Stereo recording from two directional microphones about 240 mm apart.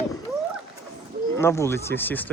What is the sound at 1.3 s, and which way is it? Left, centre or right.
Speech, centre.